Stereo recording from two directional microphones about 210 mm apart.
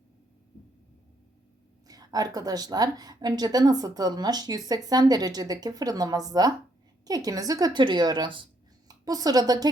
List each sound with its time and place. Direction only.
1.9 s a woman's voice: 15° right (ahead or behind)